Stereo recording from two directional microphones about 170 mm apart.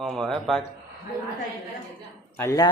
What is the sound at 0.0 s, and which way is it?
Speech, centre (ahead or behind).